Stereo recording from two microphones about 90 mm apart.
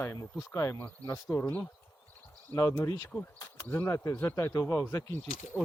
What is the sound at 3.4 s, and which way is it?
Speech, 30° left (ahead or behind).